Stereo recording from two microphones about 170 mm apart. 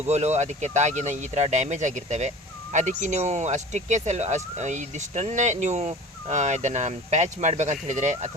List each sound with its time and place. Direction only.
0.1 s speech: 40° right (ahead or behind)